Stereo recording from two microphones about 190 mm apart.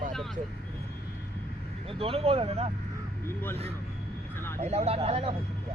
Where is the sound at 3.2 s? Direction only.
10° left (ahead or behind).